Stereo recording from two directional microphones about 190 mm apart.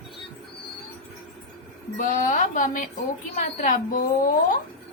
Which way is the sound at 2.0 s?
45° left (ahead or behind).